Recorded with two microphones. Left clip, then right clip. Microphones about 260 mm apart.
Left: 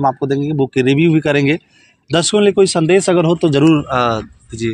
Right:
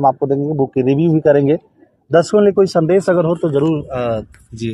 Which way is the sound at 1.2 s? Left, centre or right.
Left.